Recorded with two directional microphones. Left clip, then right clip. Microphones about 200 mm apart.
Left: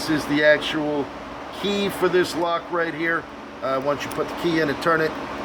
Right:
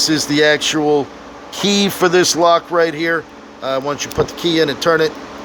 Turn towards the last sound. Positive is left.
turn(degrees=-45)  # may be behind; listen again after turning